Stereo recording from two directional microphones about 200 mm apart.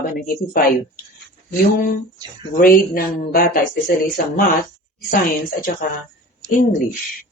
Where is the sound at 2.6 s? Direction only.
45° left (ahead or behind).